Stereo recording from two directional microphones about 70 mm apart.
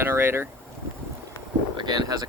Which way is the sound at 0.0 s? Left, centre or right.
Right.